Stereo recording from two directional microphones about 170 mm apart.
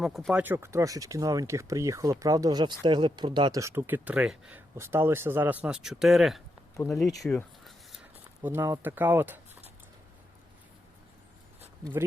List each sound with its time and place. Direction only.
0.0 s speech: centre (ahead or behind)
0.4 s speech: 15° right (ahead or behind)
6.7 s speech: 15° left (ahead or behind)
7.2 s speech: 5° left (ahead or behind)
8.4 s speech: 15° right (ahead or behind)